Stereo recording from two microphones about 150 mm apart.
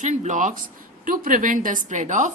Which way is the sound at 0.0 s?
55° right (ahead or behind).